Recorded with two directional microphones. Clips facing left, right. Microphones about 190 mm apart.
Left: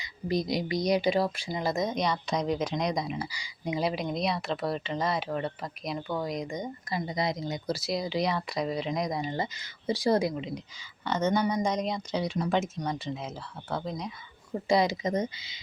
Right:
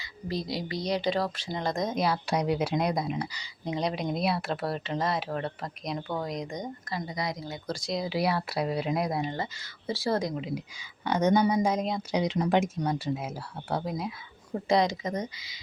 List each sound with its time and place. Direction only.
0.0 s speech: 15° left (ahead or behind); by 3.2 s centre (ahead or behind)
3.3 s speech: 10° left (ahead or behind)
6.9 s speech: 25° left (ahead or behind)
7.7 s speech: 5° left (ahead or behind)
9.3 s speech: 15° left (ahead or behind)
11.0 s speech: 15° right (ahead or behind)
12.1 s speech: 20° right (ahead or behind)
14.7 s speech: 5° left (ahead or behind)
15.0 s speech: 25° left (ahead or behind)